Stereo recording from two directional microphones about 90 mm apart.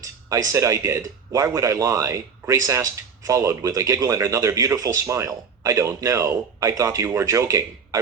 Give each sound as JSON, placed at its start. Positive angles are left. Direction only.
{"t": 0.0, "sound": "speech", "side_deg": -40}